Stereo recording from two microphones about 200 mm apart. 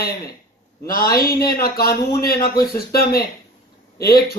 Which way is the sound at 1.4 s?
50° left (ahead or behind).